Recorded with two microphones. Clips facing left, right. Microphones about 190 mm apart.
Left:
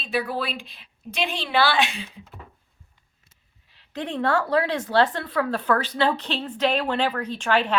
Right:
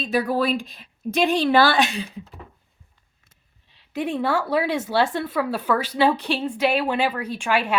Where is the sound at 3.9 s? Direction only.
10° right (ahead or behind).